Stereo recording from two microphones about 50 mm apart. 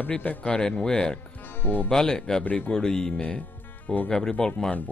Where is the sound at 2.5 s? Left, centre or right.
Left.